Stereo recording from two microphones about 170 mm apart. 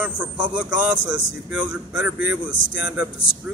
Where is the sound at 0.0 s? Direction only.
10° right (ahead or behind).